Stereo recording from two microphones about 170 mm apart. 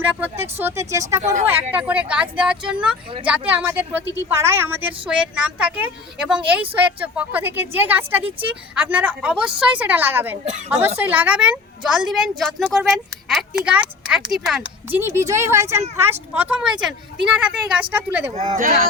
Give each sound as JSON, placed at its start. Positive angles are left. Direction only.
{"t": 0.6, "sound": "speech", "side_deg": -15}
{"t": 14.8, "sound": "speech", "side_deg": -15}
{"t": 18.3, "sound": "speech", "side_deg": -45}